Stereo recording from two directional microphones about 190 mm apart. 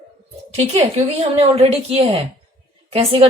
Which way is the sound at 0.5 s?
35° right (ahead or behind).